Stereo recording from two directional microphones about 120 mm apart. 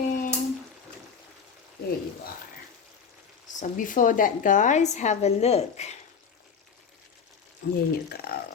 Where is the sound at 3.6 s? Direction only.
90° left; by 5.9 s 60° left (ahead or behind).